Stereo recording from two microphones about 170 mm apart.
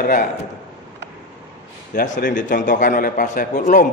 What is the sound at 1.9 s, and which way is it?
A man's voice, 45° left (ahead or behind).